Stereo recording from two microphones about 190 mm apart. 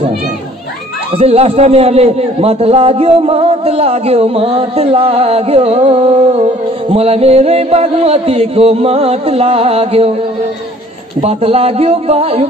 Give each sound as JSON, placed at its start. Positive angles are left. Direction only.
{"t": 1.1, "sound": "a man's voice", "side_deg": -30}
{"t": 11.1, "sound": "a man's voice", "side_deg": -30}